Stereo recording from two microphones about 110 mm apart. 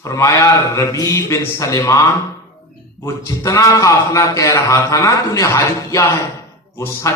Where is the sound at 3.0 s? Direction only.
30° left (ahead or behind).